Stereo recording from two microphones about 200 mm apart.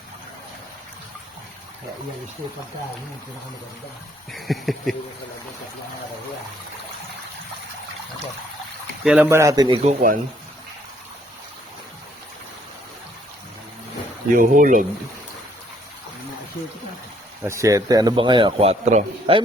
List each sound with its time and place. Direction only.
4.3 s speech: centre (ahead or behind)
9.0 s a man's voice: 5° right (ahead or behind); by 9.9 s 25° right (ahead or behind)
14.3 s speech: 40° right (ahead or behind)
17.4 s a man's voice: 15° right (ahead or behind); by 19.4 s 30° right (ahead or behind)